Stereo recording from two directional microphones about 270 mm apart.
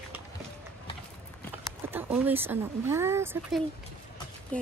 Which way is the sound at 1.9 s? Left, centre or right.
Centre.